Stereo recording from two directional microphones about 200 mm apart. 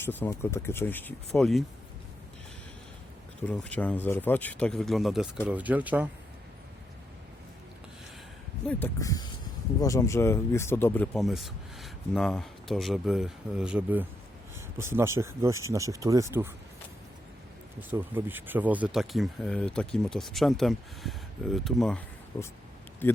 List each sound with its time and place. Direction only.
0.0 s speech: 10° left (ahead or behind)
3.4 s speech: 5° left (ahead or behind)
8.6 s speech: 15° left (ahead or behind); by 16.5 s 15° right (ahead or behind)
17.9 s speech: 10° right (ahead or behind)
23.0 s speech: 10° left (ahead or behind)